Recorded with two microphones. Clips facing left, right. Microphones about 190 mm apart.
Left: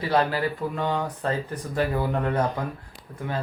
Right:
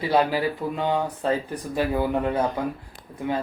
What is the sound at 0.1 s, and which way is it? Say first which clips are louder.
Speech: right 2 dB; 10° right (ahead or behind).